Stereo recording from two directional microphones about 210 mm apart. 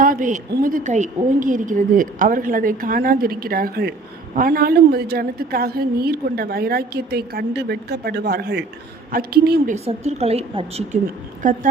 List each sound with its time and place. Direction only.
0.0 s a woman's voice: 40° right (ahead or behind)
9.7 s a woman's voice: 30° right (ahead or behind)
11.4 s a woman's voice: 40° right (ahead or behind)